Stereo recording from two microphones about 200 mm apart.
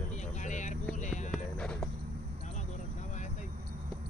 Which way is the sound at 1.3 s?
5° left (ahead or behind).